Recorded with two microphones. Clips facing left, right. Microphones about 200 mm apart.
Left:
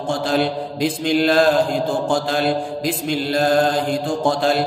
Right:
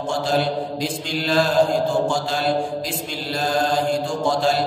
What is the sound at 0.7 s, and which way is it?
Mantra, 55° left (ahead or behind).